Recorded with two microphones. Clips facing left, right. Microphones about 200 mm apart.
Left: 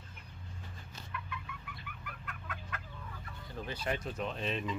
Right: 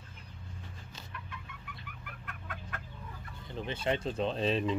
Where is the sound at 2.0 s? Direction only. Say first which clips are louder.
Even; 50° right (ahead or behind).